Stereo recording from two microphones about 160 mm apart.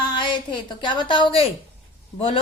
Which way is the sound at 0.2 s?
30° left (ahead or behind).